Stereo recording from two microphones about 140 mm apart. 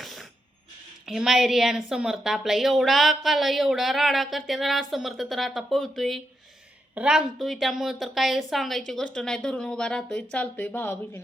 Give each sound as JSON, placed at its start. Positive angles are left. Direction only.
{"t": 0.0, "sound": "mechanisms", "side_deg": 0}
{"t": 1.0, "sound": "a woman's voice", "side_deg": 0}